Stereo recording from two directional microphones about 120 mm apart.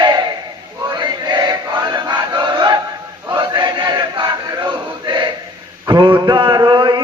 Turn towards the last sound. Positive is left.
turn(degrees=-40)  # may be behind; listen again after turning